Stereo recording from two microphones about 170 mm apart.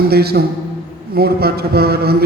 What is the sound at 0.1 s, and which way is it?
A man's voice, 65° right (ahead or behind).